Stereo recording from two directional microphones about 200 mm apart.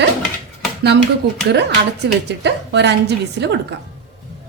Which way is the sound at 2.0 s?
60° right (ahead or behind).